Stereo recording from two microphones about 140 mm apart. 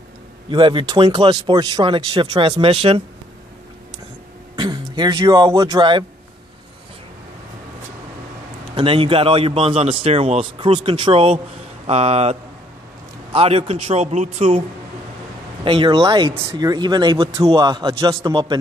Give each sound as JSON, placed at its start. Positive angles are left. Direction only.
{"t": 0.5, "sound": "speech", "side_deg": -35}
{"t": 4.6, "sound": "speech", "side_deg": -35}
{"t": 8.7, "sound": "a man's voice", "side_deg": -40}
{"t": 15.6, "sound": "speech", "side_deg": -40}